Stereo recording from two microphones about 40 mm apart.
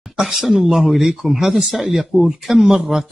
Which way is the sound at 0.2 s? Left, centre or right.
Centre.